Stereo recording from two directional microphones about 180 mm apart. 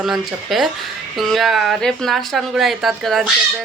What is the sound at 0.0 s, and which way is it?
Speech, centre (ahead or behind).